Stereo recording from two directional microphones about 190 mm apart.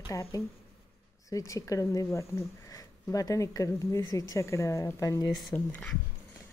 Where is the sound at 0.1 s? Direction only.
15° left (ahead or behind).